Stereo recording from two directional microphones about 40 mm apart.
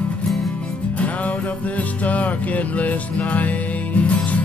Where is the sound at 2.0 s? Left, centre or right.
Left.